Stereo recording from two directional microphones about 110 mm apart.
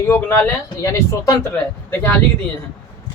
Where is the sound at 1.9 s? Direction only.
20° left (ahead or behind).